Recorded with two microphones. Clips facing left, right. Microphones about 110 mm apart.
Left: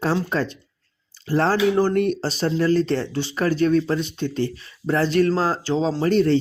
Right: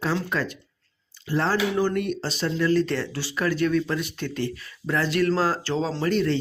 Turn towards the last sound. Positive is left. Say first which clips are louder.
# left 5 dB
turn(degrees=40)  # may be behind; listen again after turning